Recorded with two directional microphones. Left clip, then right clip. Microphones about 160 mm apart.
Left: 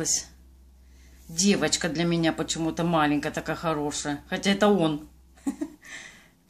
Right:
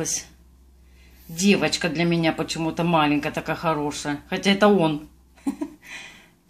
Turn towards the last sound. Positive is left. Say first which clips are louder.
# right 3 dB
turn(degrees=0)  # may be behind; listen again after turning